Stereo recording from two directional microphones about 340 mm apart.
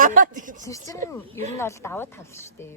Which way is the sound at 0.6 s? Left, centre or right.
Centre.